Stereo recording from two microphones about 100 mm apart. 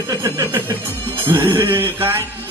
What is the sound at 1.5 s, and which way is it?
Jingle bell, 25° right (ahead or behind).